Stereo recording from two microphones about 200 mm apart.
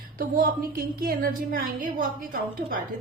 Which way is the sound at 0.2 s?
45° right (ahead or behind).